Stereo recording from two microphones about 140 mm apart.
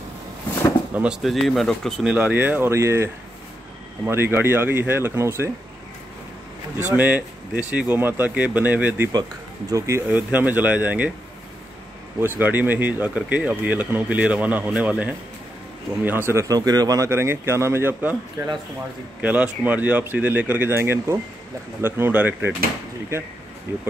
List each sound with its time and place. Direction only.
0.9 s speech: 5° right (ahead or behind)
2.1 s speech: 10° right (ahead or behind)
6.8 s speech: 10° right (ahead or behind)
12.2 s speech: 15° right (ahead or behind)
23.7 s speech: 15° right (ahead or behind)